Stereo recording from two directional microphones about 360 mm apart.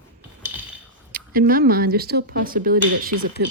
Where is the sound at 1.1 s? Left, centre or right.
Right.